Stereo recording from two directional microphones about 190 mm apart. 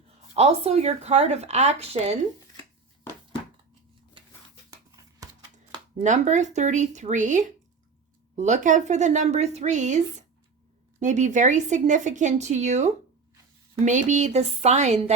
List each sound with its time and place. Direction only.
0.3 s speech: 35° right (ahead or behind)
6.0 s speech: 40° right (ahead or behind)